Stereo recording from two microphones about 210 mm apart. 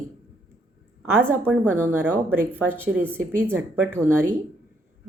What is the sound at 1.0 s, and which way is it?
Speech, 10° right (ahead or behind).